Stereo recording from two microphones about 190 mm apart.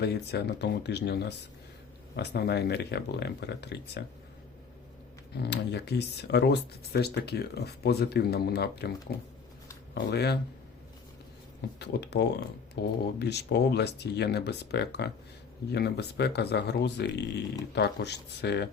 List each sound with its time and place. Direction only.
0.0 s speech: 60° left (ahead or behind)
5.3 s speech: 60° left (ahead or behind)
11.8 s speech: 60° left (ahead or behind)